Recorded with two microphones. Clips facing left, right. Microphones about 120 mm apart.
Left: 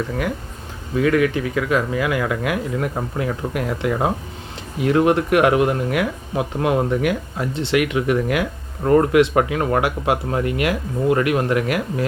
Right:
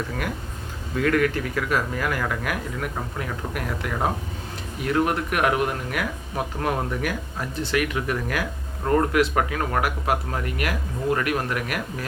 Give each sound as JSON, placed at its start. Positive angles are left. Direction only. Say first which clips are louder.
{"t": 1.0, "sound": "speech", "louder": "left 4 dB", "side_deg": 15}
{"t": 2.5, "sound": "speech", "louder": "left 6 dB", "side_deg": 30}